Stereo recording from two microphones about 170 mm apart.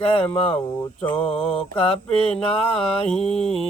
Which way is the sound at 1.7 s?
35° left (ahead or behind).